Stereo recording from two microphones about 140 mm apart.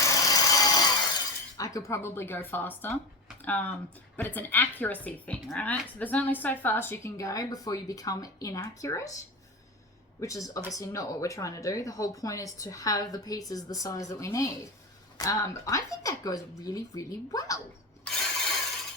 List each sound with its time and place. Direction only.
0.0 s wood: 25° left (ahead or behind)
1.5 s a woman's voice: 25° left (ahead or behind)
10.2 s speech: 25° left (ahead or behind)